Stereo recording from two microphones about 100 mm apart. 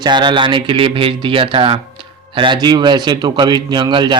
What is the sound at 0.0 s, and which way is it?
Speech, 50° right (ahead or behind).